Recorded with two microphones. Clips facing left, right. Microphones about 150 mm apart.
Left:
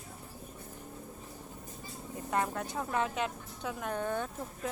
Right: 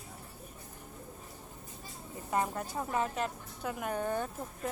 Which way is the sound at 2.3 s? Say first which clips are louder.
Even; 5° right (ahead or behind).